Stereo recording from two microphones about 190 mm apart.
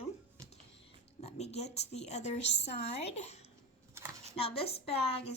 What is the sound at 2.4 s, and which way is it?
Speech, 65° left (ahead or behind).